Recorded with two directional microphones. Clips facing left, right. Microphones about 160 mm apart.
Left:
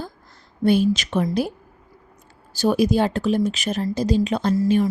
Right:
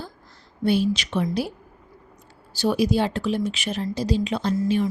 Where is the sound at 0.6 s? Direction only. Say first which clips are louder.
Left 3 dB; 50° left (ahead or behind).